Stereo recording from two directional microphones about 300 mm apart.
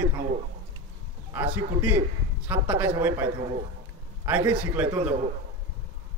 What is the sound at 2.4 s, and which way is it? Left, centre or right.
Speech, centre.